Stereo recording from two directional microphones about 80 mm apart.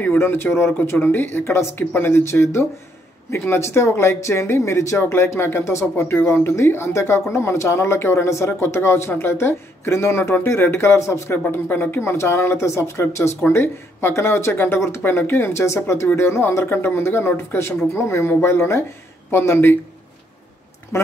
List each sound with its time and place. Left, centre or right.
0.0 s speech: left
20.9 s speech: left